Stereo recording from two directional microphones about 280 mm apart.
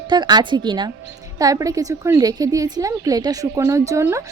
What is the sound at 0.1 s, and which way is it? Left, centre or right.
A woman's voice, centre.